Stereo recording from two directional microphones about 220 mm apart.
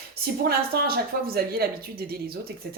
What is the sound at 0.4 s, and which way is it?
Speech, 45° right (ahead or behind).